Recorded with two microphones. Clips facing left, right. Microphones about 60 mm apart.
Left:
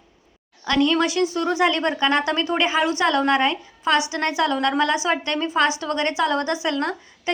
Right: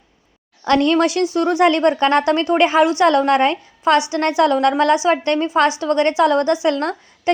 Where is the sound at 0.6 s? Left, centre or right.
Right.